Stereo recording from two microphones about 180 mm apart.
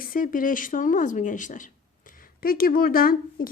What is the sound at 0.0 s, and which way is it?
A woman's voice, 50° left (ahead or behind).